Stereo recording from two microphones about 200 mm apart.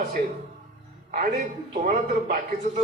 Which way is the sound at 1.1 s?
40° right (ahead or behind).